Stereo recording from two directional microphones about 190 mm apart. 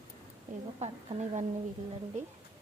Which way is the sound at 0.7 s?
35° right (ahead or behind).